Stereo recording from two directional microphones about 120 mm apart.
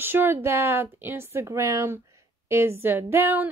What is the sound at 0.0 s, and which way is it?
A woman's voice, 15° right (ahead or behind).